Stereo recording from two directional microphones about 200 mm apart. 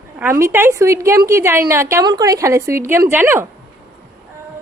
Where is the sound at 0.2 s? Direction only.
15° right (ahead or behind).